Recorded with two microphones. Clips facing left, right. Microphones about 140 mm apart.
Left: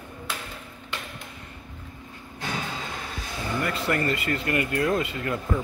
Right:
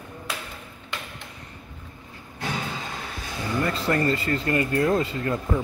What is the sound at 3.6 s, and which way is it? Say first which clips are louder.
Speech: right 3 dB; 30° right (ahead or behind).